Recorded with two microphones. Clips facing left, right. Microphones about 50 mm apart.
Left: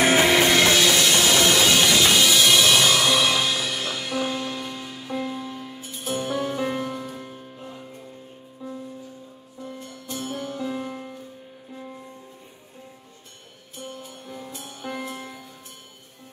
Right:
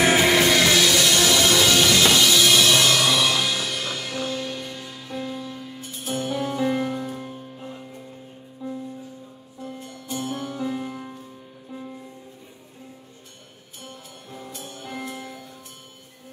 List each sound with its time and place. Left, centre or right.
0.1 s music: centre
1.6 s music: centre
5.6 s music: centre
10.8 s music: centre
14.5 s music: centre